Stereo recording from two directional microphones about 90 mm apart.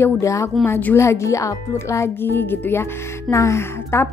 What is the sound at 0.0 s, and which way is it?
A woman's voice, 35° left (ahead or behind).